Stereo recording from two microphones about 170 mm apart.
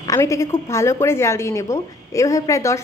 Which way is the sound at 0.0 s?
15° left (ahead or behind).